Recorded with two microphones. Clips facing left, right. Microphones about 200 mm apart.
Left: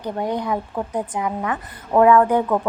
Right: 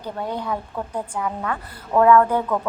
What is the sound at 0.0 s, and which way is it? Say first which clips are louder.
Speech: left 4 dB; 15° left (ahead or behind).